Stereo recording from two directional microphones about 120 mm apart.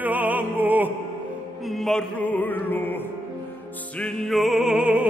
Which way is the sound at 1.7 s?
5° left (ahead or behind).